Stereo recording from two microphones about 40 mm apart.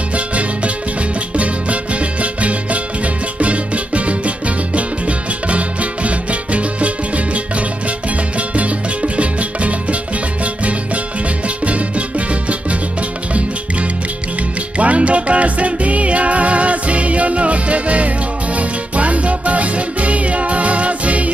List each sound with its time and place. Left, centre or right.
0.1 s music: right
8.4 s music: right
14.8 s music: right